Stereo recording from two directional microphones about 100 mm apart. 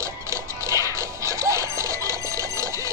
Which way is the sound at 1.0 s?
30° right (ahead or behind).